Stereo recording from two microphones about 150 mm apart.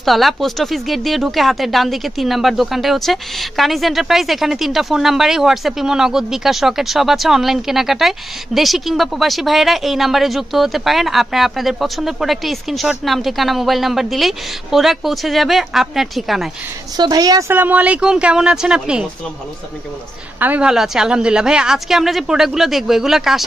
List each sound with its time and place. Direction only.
0.0 s speech: centre (ahead or behind)
16.9 s a woman's voice: 25° right (ahead or behind)
17.5 s speech: 10° right (ahead or behind)
20.3 s speech: 10° right (ahead or behind)